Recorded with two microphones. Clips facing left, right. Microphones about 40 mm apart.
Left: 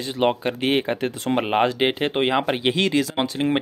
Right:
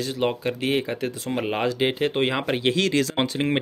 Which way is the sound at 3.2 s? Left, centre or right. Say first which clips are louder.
Left 1 dB; centre.